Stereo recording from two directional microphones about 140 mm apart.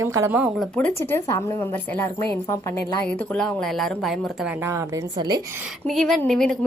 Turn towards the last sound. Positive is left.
turn(degrees=5)  # may be behind; listen again after turning